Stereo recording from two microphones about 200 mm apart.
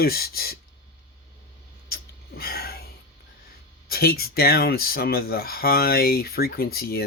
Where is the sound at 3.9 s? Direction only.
50° left (ahead or behind).